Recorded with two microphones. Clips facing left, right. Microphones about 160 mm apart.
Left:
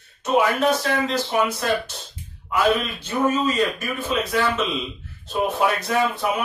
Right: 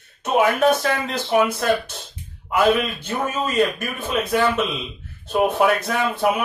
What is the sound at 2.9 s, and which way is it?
A man's voice, 55° right (ahead or behind).